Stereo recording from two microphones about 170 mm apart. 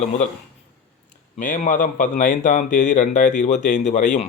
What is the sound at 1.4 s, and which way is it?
A man's voice, 50° left (ahead or behind).